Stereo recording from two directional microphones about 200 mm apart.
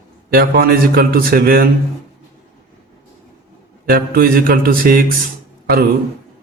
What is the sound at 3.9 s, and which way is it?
A man's voice, 50° right (ahead or behind).